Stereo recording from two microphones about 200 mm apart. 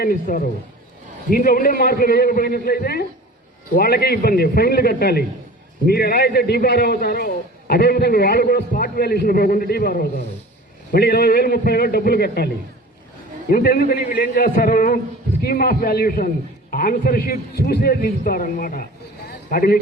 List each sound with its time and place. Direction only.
0.0 s a man's voice: 45° left (ahead or behind)
13.5 s a man's voice: 45° left (ahead or behind)
19.3 s a sound: 45° left (ahead or behind)